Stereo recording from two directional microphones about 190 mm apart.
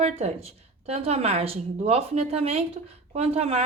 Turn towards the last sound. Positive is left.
turn(degrees=-35)  # may be behind; listen again after turning